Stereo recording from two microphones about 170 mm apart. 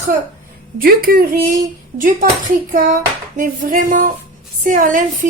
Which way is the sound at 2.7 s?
55° right (ahead or behind).